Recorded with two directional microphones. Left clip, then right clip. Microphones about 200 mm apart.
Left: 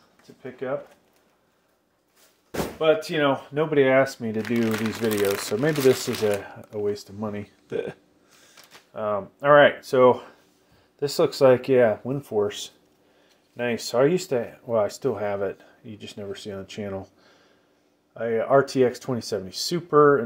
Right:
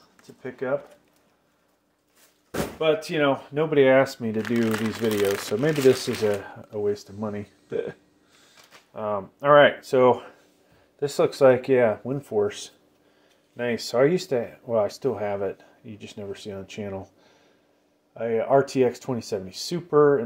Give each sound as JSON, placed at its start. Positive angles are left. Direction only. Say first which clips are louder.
{"t": 0.4, "sound": "speech", "louder": "right 2 dB", "side_deg": -20}
{"t": 2.8, "sound": "speech", "louder": "left 1 dB", "side_deg": -5}
{"t": 3.8, "sound": "speech", "louder": "right 2 dB", "side_deg": -15}